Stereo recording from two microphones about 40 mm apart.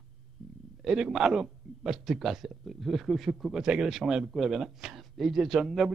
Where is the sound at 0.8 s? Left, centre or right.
Centre.